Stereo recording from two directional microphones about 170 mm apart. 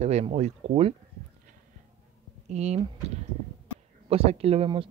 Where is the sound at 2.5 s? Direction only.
40° right (ahead or behind).